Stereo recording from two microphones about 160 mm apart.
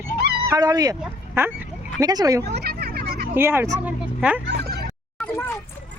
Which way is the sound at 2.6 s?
75° right (ahead or behind).